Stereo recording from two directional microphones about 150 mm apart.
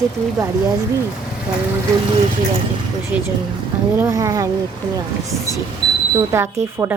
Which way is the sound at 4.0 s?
20° right (ahead or behind).